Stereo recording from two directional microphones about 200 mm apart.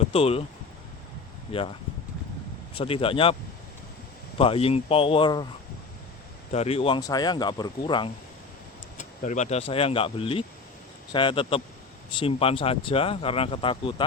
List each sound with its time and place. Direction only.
0.0 s speech: 30° left (ahead or behind)
1.5 s speech: 25° left (ahead or behind)
2.7 s speech: 30° left (ahead or behind)
4.4 s speech: 30° left (ahead or behind)
6.5 s speech: 30° left (ahead or behind)
9.0 s speech: 40° left (ahead or behind)